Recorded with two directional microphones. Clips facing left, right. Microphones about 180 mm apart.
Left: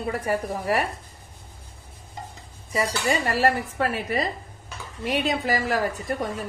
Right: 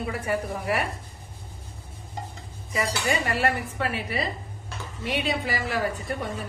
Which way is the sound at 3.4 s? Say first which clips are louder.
Left 4 dB; 40° left (ahead or behind).